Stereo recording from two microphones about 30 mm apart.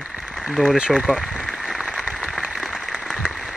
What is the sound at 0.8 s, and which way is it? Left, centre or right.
Speech, right.